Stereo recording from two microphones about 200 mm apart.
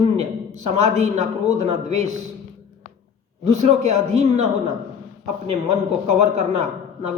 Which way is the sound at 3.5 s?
35° right (ahead or behind).